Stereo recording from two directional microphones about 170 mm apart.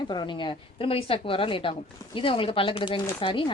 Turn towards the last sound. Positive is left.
turn(degrees=30)  # may be behind; listen again after turning